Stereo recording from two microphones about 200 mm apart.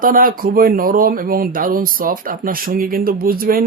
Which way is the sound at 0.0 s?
45° right (ahead or behind).